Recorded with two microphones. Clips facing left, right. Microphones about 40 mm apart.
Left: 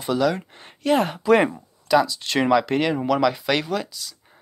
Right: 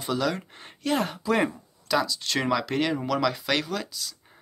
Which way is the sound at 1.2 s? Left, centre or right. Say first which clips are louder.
Left 7 dB; left.